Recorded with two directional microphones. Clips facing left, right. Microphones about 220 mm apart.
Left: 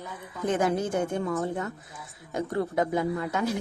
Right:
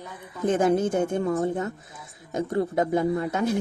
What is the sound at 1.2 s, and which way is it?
Speech, 30° right (ahead or behind).